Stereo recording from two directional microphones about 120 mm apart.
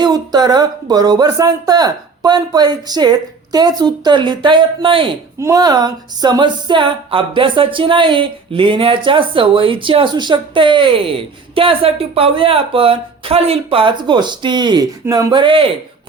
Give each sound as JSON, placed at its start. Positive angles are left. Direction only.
{"t": 0.0, "sound": "speech", "side_deg": -35}
{"t": 5.4, "sound": "speech", "side_deg": -25}